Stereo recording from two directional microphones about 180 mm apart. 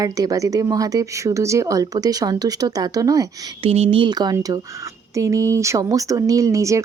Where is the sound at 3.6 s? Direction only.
35° right (ahead or behind).